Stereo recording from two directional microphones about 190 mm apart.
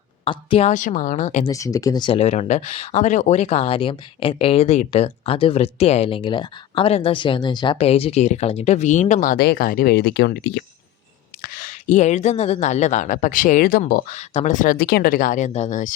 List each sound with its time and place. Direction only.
0.3 s a woman's voice: 30° left (ahead or behind)
0.7 s speech: 45° left (ahead or behind)
1.5 s speech: 15° left (ahead or behind); by 10.6 s 60° left (ahead or behind)
11.4 s speech: 45° left (ahead or behind)